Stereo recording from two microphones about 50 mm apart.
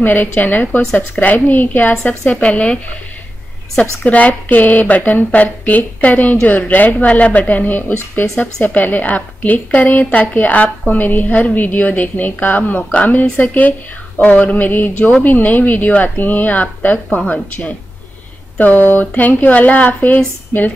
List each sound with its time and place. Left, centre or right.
0.0 s a woman's voice: left
2.4 s speech: left
4.0 s a woman's voice: left